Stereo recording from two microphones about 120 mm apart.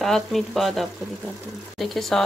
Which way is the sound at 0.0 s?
Centre (ahead or behind).